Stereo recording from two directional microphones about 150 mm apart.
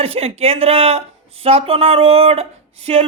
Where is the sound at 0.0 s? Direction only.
40° right (ahead or behind).